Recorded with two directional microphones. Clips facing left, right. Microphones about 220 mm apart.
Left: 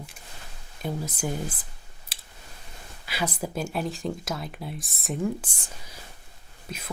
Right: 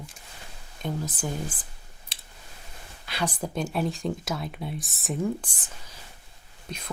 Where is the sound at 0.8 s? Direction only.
10° left (ahead or behind).